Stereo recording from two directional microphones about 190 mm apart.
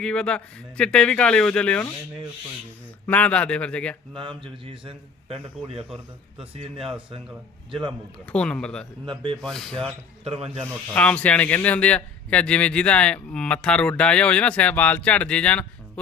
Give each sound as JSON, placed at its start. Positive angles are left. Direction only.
{"t": 0.0, "sound": "speech", "side_deg": 5}
{"t": 3.1, "sound": "speech", "side_deg": 5}
{"t": 4.2, "sound": "a man's voice", "side_deg": -25}
{"t": 8.3, "sound": "speech", "side_deg": 5}
{"t": 9.0, "sound": "a man's voice", "side_deg": -25}
{"t": 9.4, "sound": "speech", "side_deg": 0}
{"t": 10.2, "sound": "speech", "side_deg": -30}
{"t": 10.6, "sound": "speech", "side_deg": 5}